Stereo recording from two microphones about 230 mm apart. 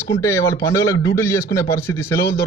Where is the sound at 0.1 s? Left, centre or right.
Centre.